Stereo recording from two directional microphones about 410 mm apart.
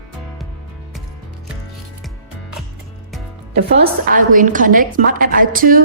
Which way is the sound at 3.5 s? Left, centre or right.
Right.